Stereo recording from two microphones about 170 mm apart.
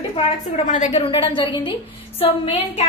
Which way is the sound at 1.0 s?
30° left (ahead or behind).